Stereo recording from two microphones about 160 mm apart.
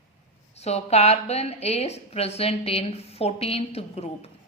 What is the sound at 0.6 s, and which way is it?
A woman's voice, 40° left (ahead or behind).